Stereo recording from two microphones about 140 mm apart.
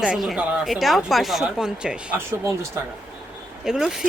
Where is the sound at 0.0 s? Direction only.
5° right (ahead or behind).